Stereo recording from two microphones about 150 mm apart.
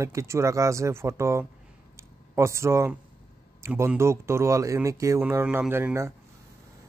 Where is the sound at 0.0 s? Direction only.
20° right (ahead or behind).